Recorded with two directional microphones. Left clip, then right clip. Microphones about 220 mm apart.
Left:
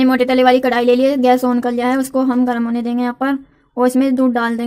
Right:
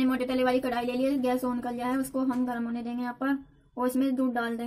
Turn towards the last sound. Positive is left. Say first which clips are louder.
# left 13 dB
turn(degrees=40)  # may be behind; listen again after turning